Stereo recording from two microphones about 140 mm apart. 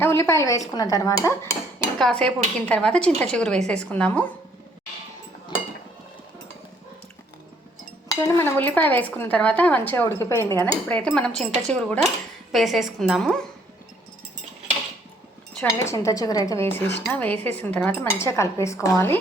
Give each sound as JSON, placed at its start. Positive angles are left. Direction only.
{"t": 0.0, "sound": "a woman's voice", "side_deg": 20}
{"t": 2.0, "sound": "speech", "side_deg": 5}
{"t": 8.1, "sound": "speech", "side_deg": 20}
{"t": 10.8, "sound": "a woman's voice", "side_deg": 5}
{"t": 15.8, "sound": "speech", "side_deg": 20}